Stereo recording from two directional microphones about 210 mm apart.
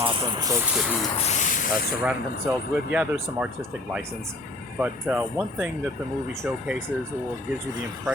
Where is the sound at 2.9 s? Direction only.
5° right (ahead or behind).